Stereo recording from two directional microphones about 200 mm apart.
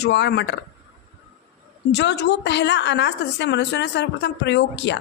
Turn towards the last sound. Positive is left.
turn(degrees=60)  # may be behind; listen again after turning